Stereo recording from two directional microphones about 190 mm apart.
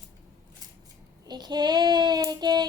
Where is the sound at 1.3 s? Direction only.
20° right (ahead or behind).